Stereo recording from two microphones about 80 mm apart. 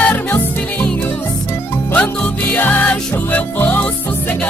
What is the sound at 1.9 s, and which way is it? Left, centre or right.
Music, left.